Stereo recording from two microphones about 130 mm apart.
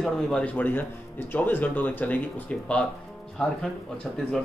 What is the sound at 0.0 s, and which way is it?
Speech, 5° left (ahead or behind).